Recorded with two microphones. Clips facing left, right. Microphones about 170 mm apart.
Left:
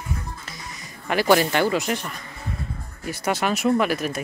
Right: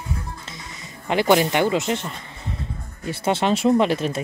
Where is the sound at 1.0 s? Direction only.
20° right (ahead or behind).